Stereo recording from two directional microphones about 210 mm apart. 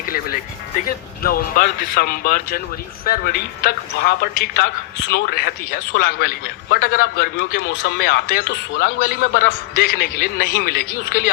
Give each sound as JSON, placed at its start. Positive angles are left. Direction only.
{"t": 1.2, "sound": "speech", "side_deg": 45}